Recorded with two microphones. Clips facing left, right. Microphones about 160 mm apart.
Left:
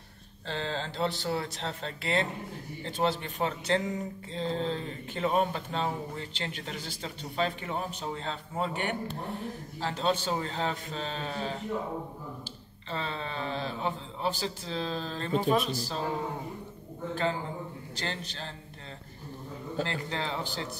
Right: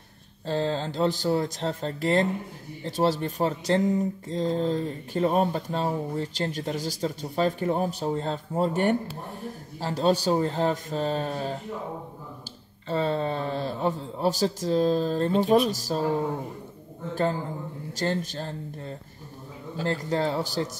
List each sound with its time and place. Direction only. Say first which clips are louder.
0.5 s speech: right 7 dB; 40° right (ahead or behind)
12.8 s speech: right 10 dB; 45° right (ahead or behind)
17.9 s speech: right 10 dB; 45° right (ahead or behind)
19.9 s speech: right 8 dB; 40° right (ahead or behind)